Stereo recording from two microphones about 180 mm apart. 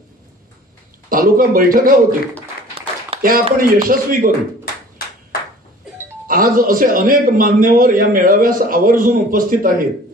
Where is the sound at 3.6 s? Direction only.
50° right (ahead or behind).